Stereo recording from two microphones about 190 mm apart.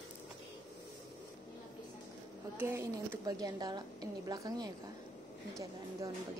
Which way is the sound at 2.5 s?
15° right (ahead or behind).